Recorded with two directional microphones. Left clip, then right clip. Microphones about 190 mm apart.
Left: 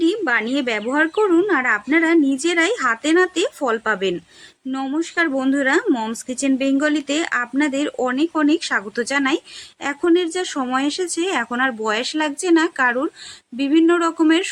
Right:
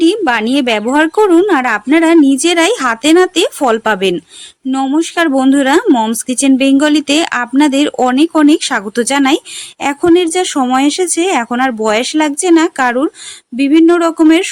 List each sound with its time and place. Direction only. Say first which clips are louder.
0.0 s speech: right 7 dB; 45° right (ahead or behind)